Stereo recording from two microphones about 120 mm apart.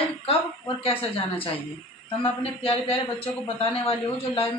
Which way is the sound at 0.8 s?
55° left (ahead or behind).